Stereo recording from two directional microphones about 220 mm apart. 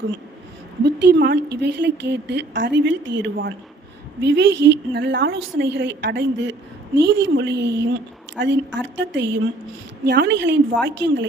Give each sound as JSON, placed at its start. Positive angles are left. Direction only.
{"t": 0.9, "sound": "a woman's voice", "side_deg": -50}